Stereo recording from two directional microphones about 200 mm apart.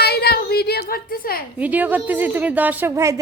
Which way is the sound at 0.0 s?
50° left (ahead or behind).